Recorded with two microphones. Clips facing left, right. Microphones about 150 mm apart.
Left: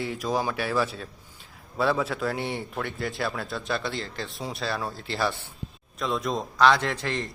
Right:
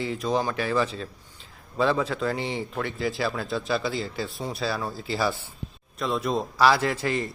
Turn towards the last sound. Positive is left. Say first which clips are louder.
# right 3 dB
turn(degrees=-5)  # may be behind; listen again after turning